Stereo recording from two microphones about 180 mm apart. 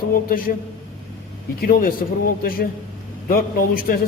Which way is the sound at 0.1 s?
50° left (ahead or behind).